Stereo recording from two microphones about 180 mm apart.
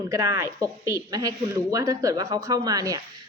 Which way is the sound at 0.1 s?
15° right (ahead or behind).